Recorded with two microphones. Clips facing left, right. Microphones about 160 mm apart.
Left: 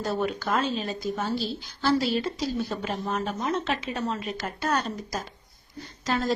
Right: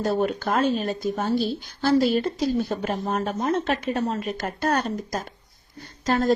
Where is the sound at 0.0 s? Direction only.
50° right (ahead or behind).